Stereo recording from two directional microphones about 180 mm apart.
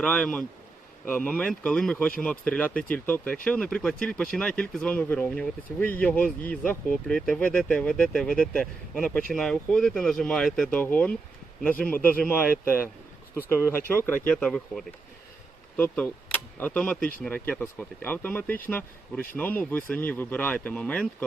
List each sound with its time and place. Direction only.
0.0 s speech: 5° left (ahead or behind)